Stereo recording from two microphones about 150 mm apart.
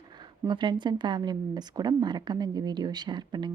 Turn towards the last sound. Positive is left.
turn(degrees=-30)  # may be behind; listen again after turning